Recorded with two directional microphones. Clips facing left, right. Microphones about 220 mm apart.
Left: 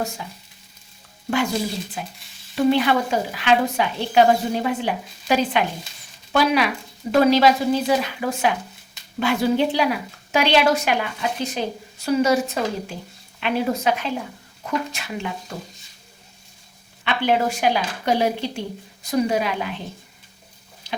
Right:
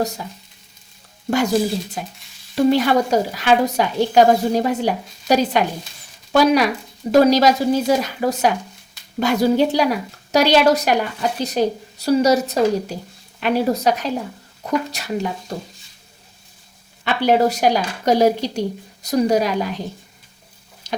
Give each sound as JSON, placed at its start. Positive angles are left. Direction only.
{"t": 2.0, "sound": "sizzle", "side_deg": -40}
{"t": 2.6, "sound": "a woman's voice", "side_deg": -40}
{"t": 17.0, "sound": "a woman's voice", "side_deg": -40}
{"t": 20.9, "sound": "chicken", "side_deg": -45}